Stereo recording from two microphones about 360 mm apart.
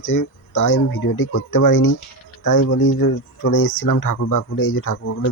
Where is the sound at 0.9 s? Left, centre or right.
Left.